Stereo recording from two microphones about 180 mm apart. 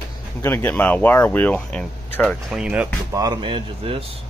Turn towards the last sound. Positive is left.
turn(degrees=-30)  # may be behind; listen again after turning